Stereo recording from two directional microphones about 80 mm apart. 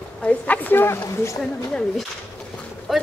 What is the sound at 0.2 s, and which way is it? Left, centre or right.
Speech, centre.